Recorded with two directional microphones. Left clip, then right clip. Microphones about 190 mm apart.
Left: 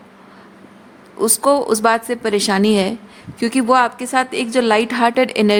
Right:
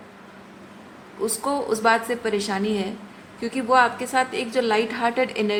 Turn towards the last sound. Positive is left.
turn(degrees=70)  # may be behind; listen again after turning